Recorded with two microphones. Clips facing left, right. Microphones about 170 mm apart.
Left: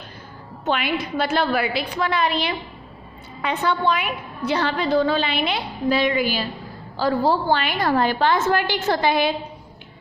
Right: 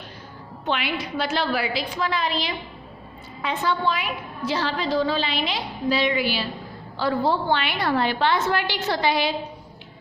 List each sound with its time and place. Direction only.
0.6 s a woman's voice: 45° left (ahead or behind)